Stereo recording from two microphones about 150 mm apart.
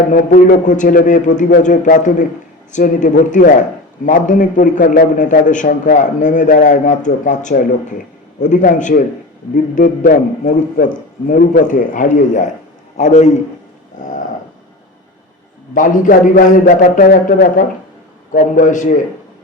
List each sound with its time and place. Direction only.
0.1 s a man's voice: 65° left (ahead or behind)
15.7 s a man's voice: 60° left (ahead or behind)
18.3 s a man's voice: 65° left (ahead or behind)